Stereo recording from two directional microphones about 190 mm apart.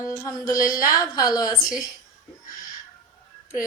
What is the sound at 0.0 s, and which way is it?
A woman's voice, 20° left (ahead or behind).